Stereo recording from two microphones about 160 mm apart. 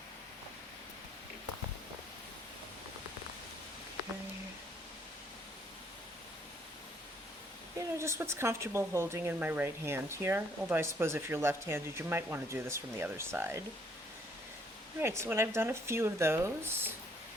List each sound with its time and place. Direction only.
7.8 s speech: 15° right (ahead or behind)
15.0 s speech: 15° right (ahead or behind)